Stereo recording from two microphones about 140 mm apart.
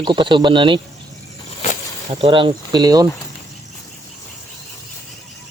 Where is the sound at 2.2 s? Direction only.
40° right (ahead or behind).